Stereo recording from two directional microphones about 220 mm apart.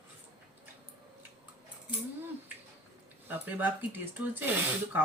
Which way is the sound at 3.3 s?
10° right (ahead or behind).